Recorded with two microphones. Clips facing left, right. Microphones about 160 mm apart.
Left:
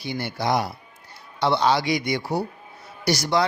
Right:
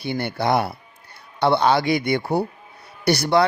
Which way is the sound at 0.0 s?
55° right (ahead or behind).